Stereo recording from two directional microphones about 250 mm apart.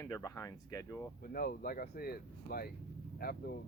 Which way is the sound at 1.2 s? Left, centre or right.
Left.